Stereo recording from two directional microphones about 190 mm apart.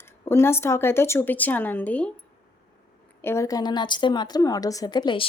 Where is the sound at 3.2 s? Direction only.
15° left (ahead or behind).